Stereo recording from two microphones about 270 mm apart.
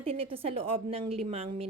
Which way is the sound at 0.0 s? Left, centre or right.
Right.